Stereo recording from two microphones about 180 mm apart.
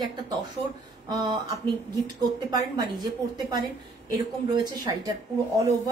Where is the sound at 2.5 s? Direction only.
25° right (ahead or behind).